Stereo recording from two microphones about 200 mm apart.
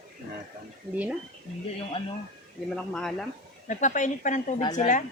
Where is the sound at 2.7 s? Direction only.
5° left (ahead or behind).